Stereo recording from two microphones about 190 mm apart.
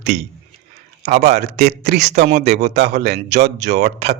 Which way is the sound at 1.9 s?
60° right (ahead or behind).